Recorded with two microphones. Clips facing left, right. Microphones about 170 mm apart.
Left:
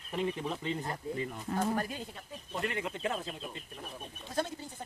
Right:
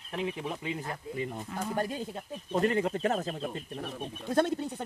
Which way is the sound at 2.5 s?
40° right (ahead or behind).